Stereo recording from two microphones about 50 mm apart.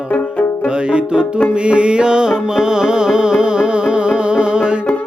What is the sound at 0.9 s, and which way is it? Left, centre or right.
Music, centre.